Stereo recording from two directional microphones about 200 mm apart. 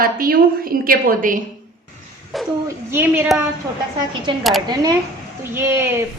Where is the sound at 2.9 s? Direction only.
10° right (ahead or behind).